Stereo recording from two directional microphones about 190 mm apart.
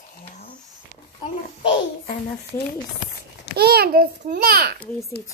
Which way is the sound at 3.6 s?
55° right (ahead or behind).